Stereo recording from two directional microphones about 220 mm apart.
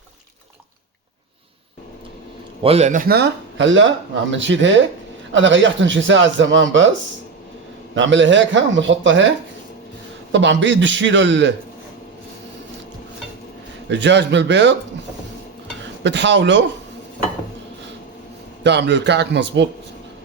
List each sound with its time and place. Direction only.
2.6 s speech: 30° right (ahead or behind); by 6.9 s 60° right (ahead or behind)
7.9 s speech: 55° right (ahead or behind)
10.3 s speech: 55° right (ahead or behind)
13.9 s speech: 55° right (ahead or behind)
16.0 s speech: 55° right (ahead or behind)
18.6 s speech: 50° right (ahead or behind)